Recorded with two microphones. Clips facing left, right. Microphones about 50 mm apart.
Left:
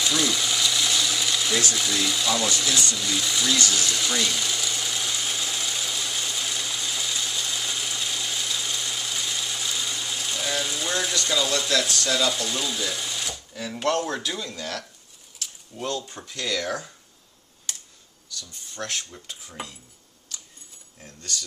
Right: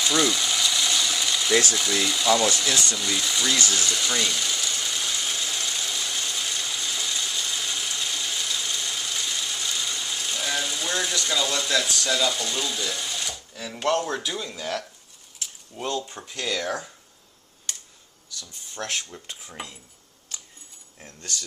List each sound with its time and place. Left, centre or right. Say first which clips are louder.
0.0 s mechanisms: right 2 dB; centre
1.7 s speech: right 1 dB; centre
3.6 s sewing machine: even; centre
14.2 s speech: even; centre
18.3 s speech: even; right
19.6 s speech: left 1 dB; centre
21.0 s speech: left 1 dB; right